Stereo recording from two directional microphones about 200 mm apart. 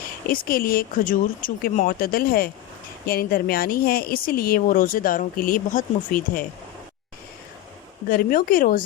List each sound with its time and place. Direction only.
0.3 s a woman's voice: 45° left (ahead or behind)
8.0 s a woman's voice: 45° left (ahead or behind)